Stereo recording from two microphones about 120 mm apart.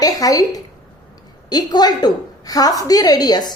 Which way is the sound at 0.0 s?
30° left (ahead or behind).